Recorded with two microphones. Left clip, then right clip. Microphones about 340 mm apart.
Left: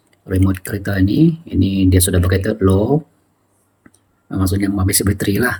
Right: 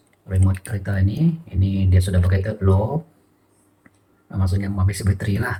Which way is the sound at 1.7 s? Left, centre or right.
Left.